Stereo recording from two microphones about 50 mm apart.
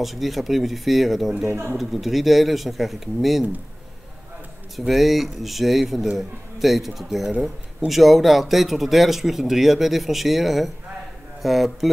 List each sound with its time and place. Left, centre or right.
0.0 s speech: centre
1.5 s speech: right
1.8 s speech: centre
4.7 s speech: centre